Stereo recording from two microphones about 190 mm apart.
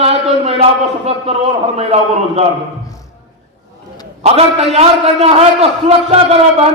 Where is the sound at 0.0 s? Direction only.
35° right (ahead or behind).